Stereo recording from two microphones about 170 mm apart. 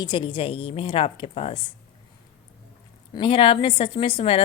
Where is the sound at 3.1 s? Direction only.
30° left (ahead or behind).